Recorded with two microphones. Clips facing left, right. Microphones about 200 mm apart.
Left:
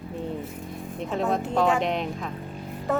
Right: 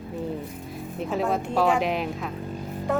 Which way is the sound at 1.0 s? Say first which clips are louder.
Even; 5° right (ahead or behind).